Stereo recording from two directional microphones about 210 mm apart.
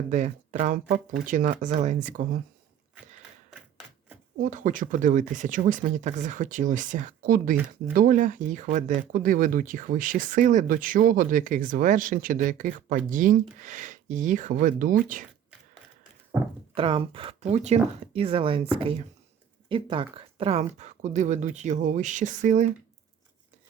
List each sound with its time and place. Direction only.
0.1 s speech: 35° right (ahead or behind)
4.4 s speech: 40° right (ahead or behind)
16.7 s speech: 25° right (ahead or behind)